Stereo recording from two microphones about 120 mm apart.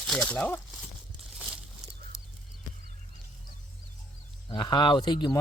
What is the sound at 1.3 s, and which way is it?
Crumpling, centre (ahead or behind).